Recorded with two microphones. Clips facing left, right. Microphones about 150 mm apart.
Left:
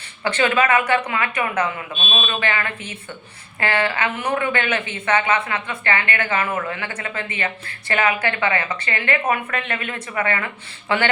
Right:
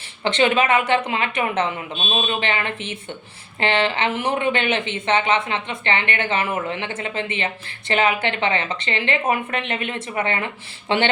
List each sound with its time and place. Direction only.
0.3 s speech: 20° right (ahead or behind)